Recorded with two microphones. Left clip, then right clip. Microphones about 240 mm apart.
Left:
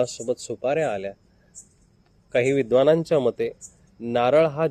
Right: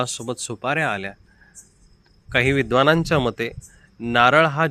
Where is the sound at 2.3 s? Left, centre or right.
Right.